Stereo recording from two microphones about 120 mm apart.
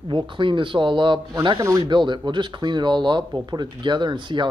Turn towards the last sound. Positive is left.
turn(degrees=-40)  # may be behind; listen again after turning